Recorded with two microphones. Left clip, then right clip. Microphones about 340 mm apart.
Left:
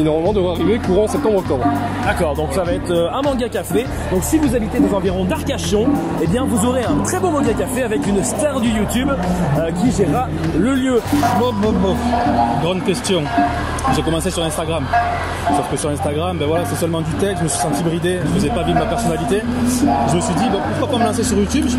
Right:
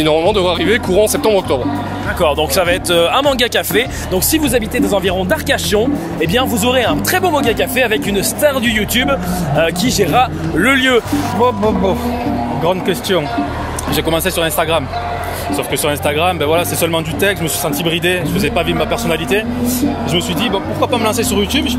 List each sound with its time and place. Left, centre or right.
0.3 s speech: right
3.0 s speech: right
5.5 s speech: right
6.3 s speech: right
16.5 s speech: right
19.3 s speech: right